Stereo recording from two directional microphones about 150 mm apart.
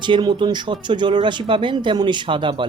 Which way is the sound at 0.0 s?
30° right (ahead or behind).